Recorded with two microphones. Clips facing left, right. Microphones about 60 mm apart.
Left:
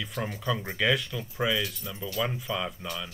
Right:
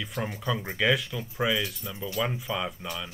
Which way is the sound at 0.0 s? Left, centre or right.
Centre.